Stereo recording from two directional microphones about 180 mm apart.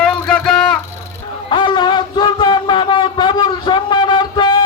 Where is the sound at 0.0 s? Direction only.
5° left (ahead or behind).